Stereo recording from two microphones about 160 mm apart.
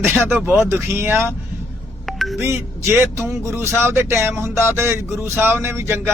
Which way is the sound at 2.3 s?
15° right (ahead or behind).